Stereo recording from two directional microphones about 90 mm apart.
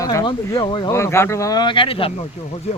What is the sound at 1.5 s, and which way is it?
Speech, 60° left (ahead or behind).